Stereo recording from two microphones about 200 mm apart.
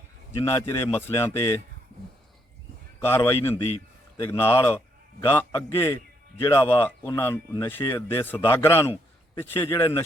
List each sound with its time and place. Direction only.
0.4 s a man's voice: 10° left (ahead or behind)
3.0 s a man's voice: 10° left (ahead or behind)